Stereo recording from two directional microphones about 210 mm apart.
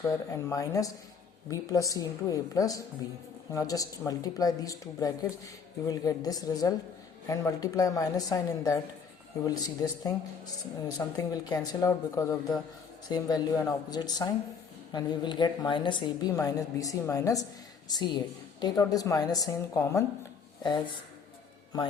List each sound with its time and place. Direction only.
0.0 s a woman's voice: 10° left (ahead or behind)